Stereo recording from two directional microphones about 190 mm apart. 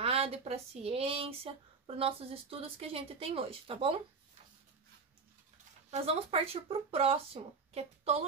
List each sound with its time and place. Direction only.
0.0 s speech: 30° right (ahead or behind)
5.9 s speech: 30° right (ahead or behind)